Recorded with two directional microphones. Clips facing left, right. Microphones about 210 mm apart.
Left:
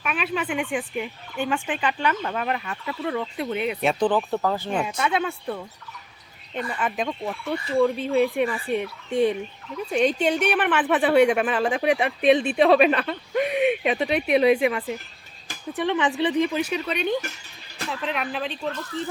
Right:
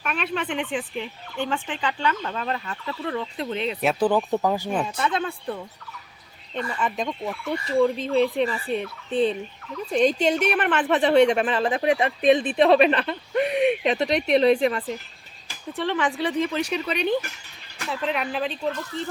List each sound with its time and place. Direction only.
0.0 s a woman's voice: 5° left (ahead or behind)
3.8 s speech: 5° right (ahead or behind)
4.8 s a woman's voice: 10° left (ahead or behind)
7.9 s a woman's voice: 10° left (ahead or behind)